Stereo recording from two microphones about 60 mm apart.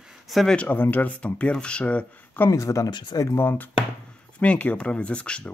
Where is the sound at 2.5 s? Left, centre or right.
Left.